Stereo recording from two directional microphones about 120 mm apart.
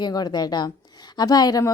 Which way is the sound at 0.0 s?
35° left (ahead or behind).